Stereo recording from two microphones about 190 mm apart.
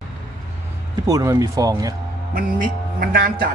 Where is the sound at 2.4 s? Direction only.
50° right (ahead or behind).